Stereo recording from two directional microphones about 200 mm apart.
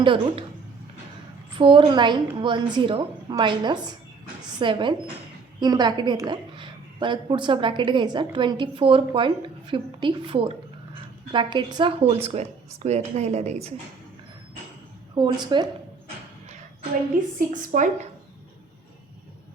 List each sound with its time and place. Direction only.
0.0 s a woman's voice: 25° right (ahead or behind)
1.5 s a woman's voice: 25° right (ahead or behind)
15.1 s a woman's voice: 20° right (ahead or behind)
17.3 s speech: 40° right (ahead or behind)